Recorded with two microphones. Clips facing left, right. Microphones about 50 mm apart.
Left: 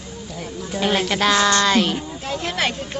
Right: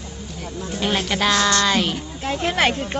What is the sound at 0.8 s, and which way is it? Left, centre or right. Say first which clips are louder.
Speech: left 2 dB; centre.